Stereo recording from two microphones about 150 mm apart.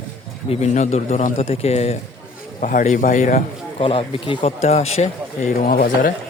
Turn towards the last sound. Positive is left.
turn(degrees=65)  # may be behind; listen again after turning